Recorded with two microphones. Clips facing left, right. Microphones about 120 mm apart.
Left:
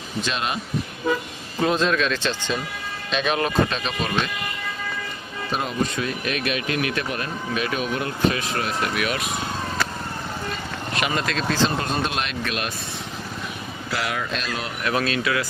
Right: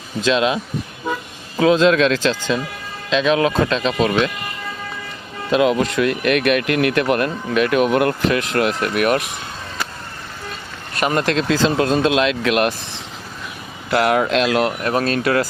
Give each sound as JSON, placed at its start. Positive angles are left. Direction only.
{"t": 1.5, "sound": "speech", "side_deg": -90}
{"t": 5.5, "sound": "speech", "side_deg": -90}
{"t": 11.1, "sound": "speech", "side_deg": -80}
{"t": 13.9, "sound": "speech", "side_deg": -60}
{"t": 14.8, "sound": "speech", "side_deg": -40}